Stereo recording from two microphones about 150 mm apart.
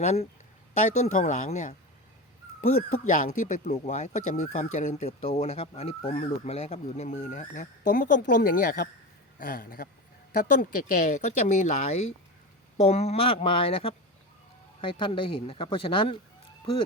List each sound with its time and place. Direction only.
0.0 s speech: 50° left (ahead or behind)
2.7 s speech: 55° left (ahead or behind); by 8.9 s 80° left
9.4 s speech: 70° left (ahead or behind); by 16.2 s 35° left (ahead or behind)